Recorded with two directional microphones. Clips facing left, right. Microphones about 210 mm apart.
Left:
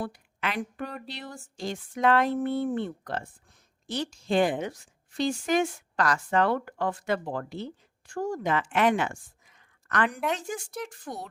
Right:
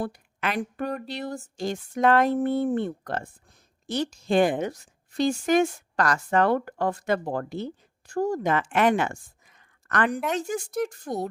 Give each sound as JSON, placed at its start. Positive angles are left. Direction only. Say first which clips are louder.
{"t": 0.0, "sound": "a woman's voice", "louder": "right 3 dB", "side_deg": -45}